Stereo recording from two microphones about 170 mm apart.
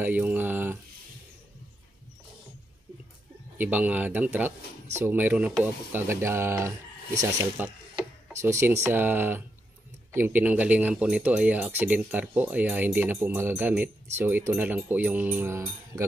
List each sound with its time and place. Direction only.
0.0 s speech: 10° right (ahead or behind)
3.5 s speech: 10° right (ahead or behind)